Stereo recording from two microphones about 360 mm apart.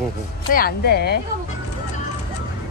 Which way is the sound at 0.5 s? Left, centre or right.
Left.